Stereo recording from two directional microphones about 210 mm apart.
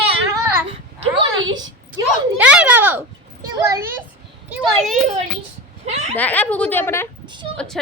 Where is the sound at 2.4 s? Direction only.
5° right (ahead or behind).